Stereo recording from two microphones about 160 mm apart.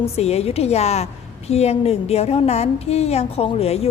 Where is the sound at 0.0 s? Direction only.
40° left (ahead or behind).